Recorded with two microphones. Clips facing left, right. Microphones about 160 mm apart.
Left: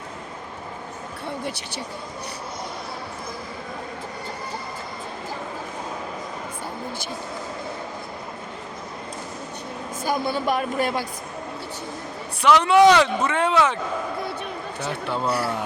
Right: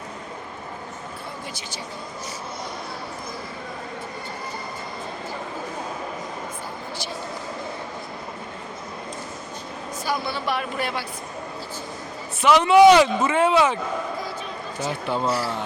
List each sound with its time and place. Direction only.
10.0 s speech: 45° left (ahead or behind)
12.4 s speech: 5° right (ahead or behind)
14.8 s speech: centre (ahead or behind)